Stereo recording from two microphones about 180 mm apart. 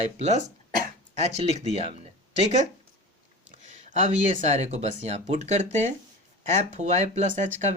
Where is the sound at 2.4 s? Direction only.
40° left (ahead or behind).